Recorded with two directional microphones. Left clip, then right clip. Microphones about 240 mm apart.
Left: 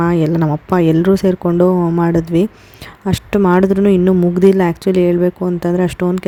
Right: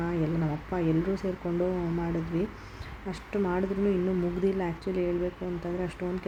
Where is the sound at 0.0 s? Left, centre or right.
Left.